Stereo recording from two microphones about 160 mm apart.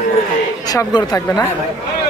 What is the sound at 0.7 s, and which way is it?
Speech, 25° left (ahead or behind).